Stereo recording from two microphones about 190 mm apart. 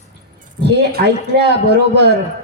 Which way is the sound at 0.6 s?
60° right (ahead or behind).